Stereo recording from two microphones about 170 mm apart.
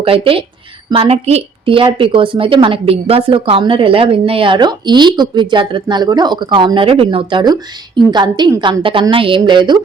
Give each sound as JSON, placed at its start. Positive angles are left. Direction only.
{"t": 0.0, "sound": "a woman's voice", "side_deg": -30}